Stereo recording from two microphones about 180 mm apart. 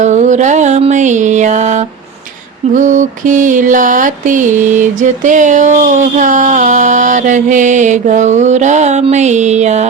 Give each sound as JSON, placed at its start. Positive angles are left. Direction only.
{"t": 0.0, "sound": "music", "side_deg": -40}
{"t": 2.7, "sound": "mantra", "side_deg": -45}